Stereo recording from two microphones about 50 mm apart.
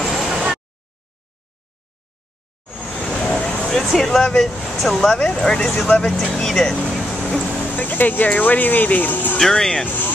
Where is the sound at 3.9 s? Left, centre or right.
Centre.